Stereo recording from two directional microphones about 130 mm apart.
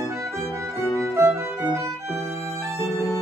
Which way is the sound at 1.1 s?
20° right (ahead or behind).